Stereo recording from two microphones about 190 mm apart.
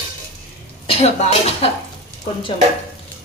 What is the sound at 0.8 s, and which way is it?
Speech, 30° left (ahead or behind).